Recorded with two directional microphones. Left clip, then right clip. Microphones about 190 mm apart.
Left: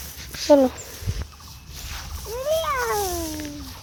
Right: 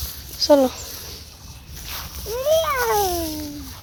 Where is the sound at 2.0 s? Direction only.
45° right (ahead or behind).